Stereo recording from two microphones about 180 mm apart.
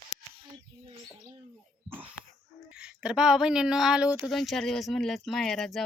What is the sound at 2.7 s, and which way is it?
Speech, 5° right (ahead or behind).